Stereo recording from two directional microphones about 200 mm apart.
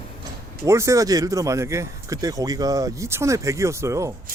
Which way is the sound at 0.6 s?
15° right (ahead or behind).